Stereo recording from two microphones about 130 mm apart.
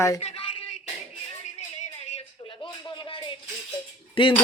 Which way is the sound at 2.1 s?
50° left (ahead or behind).